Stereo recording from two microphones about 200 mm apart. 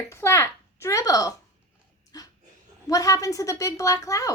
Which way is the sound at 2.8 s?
15° left (ahead or behind).